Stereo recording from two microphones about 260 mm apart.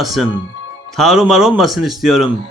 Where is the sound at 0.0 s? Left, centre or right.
Centre.